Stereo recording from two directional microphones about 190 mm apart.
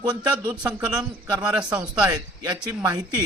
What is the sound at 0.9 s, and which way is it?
Speech, 20° right (ahead or behind).